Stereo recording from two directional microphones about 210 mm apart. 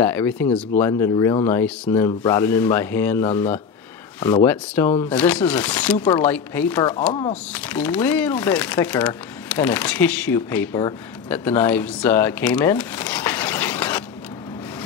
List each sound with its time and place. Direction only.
0.0 s speech: 10° left (ahead or behind)